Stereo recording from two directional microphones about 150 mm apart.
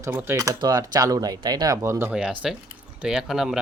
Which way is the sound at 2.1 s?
5° right (ahead or behind).